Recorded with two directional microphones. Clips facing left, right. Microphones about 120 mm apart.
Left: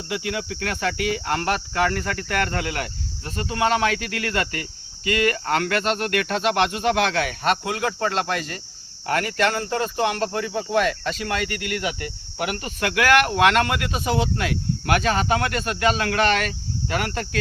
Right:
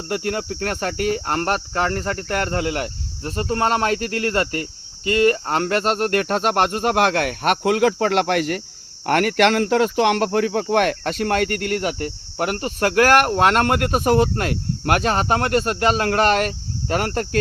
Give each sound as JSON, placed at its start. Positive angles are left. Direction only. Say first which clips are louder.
{"t": 0.1, "sound": "cricket", "louder": "right 4 dB", "side_deg": -45}
{"t": 3.2, "sound": "speech", "louder": "right 2 dB", "side_deg": -40}